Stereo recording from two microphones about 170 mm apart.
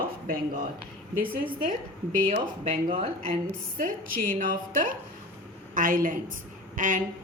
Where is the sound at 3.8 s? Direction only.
55° right (ahead or behind).